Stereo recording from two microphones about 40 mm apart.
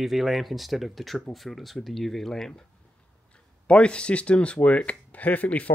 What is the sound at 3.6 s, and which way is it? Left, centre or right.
Speech, left.